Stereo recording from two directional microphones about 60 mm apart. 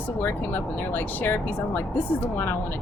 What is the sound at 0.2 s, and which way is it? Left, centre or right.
Speech, left.